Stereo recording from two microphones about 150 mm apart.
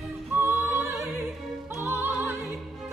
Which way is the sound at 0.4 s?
15° right (ahead or behind).